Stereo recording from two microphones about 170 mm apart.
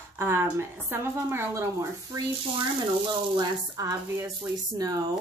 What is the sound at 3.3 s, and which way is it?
Speech, 20° right (ahead or behind).